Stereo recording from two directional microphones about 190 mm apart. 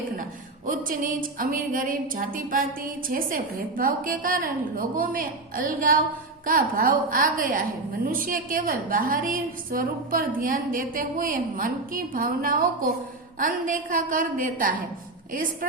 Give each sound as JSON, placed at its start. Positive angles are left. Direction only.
{"t": 0.2, "sound": "a woman's voice", "side_deg": -45}